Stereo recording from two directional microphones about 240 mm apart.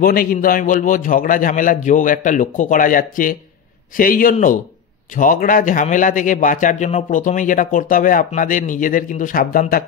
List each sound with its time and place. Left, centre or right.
0.0 s a man's voice: left